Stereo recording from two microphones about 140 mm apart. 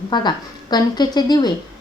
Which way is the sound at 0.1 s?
30° left (ahead or behind).